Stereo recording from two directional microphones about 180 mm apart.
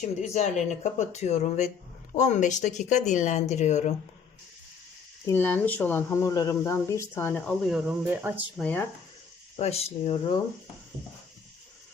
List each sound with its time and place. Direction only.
0.2 s speech: 40° left (ahead or behind)
5.3 s speech: 10° left (ahead or behind); by 8.4 s 10° right (ahead or behind)
8.5 s speech: 5° left (ahead or behind)
9.6 s speech: 35° left (ahead or behind)